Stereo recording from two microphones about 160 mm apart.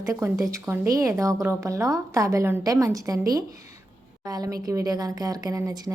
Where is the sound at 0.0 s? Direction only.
20° right (ahead or behind).